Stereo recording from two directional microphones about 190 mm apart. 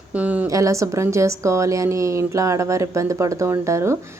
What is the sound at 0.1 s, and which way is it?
A woman's voice, 5° right (ahead or behind).